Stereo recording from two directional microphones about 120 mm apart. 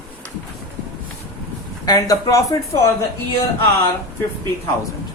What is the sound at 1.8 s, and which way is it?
Speech, 30° left (ahead or behind).